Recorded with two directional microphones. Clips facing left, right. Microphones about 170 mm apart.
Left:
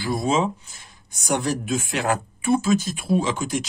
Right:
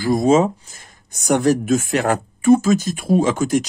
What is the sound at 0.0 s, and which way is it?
Speech, 45° right (ahead or behind).